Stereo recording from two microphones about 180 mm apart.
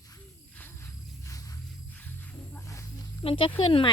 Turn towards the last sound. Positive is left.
turn(degrees=30)  # may be behind; listen again after turning